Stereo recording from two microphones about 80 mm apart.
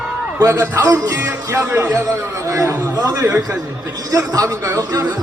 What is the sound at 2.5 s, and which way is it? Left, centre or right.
Speech, right.